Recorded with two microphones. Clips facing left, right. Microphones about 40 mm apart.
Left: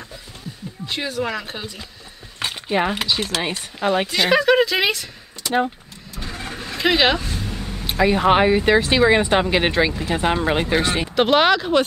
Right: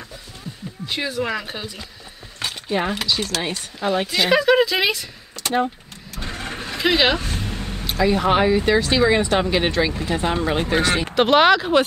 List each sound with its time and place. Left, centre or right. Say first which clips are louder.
0.8 s speech: even; centre
2.4 s speech: left 2 dB; centre
4.1 s speech: right 1 dB; centre
6.2 s vehicle: right 1 dB; right
6.6 s a sound: left 1 dB; centre
7.2 s vehicle: right 1 dB; right
8.0 s speech: left 2 dB; centre
11.1 s speech: right 1 dB; centre